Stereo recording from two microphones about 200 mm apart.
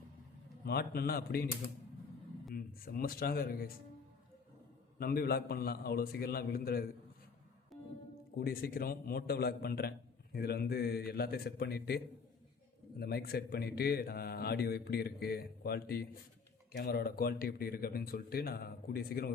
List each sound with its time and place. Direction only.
0.6 s a man's voice: 50° left (ahead or behind)
4.9 s a man's voice: 50° left (ahead or behind)
8.4 s a man's voice: 50° left (ahead or behind)